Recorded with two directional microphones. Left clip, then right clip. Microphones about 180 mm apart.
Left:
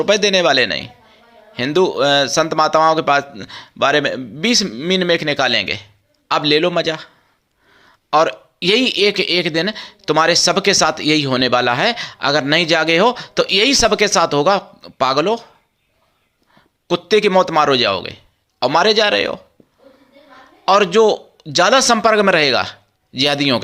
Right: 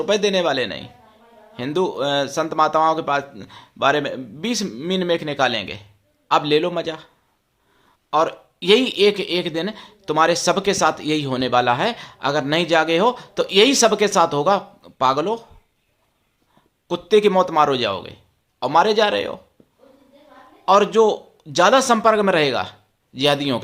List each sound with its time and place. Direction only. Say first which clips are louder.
0.0 s a man's voice: left 5 dB; 15° left (ahead or behind)
16.9 s a man's voice: left 3 dB; 15° left (ahead or behind)
20.7 s a man's voice: left 3 dB; 10° left (ahead or behind)